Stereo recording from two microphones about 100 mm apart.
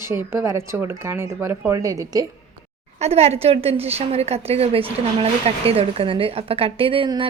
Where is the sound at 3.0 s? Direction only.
90° right; by 7.1 s 65° right (ahead or behind).